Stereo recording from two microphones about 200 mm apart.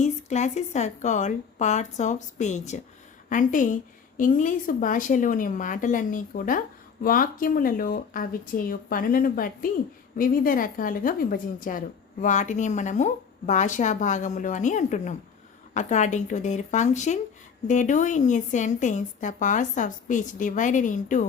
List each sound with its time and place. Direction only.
0.0 s a woman's voice: 35° left (ahead or behind)